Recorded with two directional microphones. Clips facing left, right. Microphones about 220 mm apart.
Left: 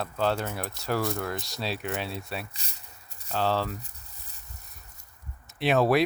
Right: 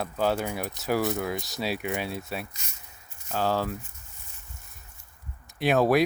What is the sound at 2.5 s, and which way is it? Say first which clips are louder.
Speech: left 1 dB; 35° left (ahead or behind).